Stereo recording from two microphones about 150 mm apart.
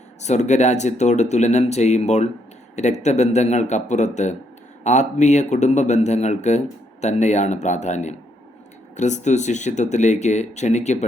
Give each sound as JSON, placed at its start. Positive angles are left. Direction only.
{"t": 0.2, "sound": "speech", "side_deg": 50}